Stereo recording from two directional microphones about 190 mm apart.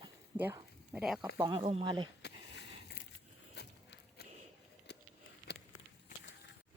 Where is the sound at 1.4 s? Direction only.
25° right (ahead or behind).